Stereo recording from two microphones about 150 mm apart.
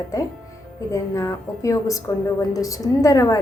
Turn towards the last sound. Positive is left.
turn(degrees=20)  # may be behind; listen again after turning